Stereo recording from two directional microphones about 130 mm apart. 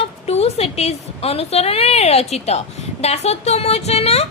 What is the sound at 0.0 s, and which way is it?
A woman's voice, 50° left (ahead or behind).